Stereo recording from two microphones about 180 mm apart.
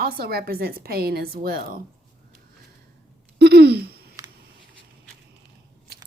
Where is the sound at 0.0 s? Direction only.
60° right (ahead or behind).